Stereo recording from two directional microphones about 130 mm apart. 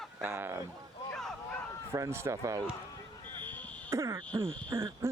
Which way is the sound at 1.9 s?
20° right (ahead or behind).